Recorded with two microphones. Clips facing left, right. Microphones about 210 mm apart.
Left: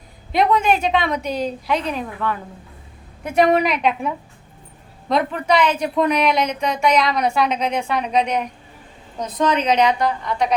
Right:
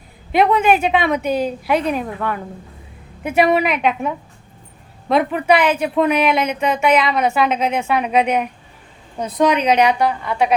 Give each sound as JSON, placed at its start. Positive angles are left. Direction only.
{"t": 0.3, "sound": "a woman's voice", "side_deg": -5}
{"t": 1.9, "sound": "a woman's voice", "side_deg": -55}
{"t": 3.2, "sound": "a woman's voice", "side_deg": -10}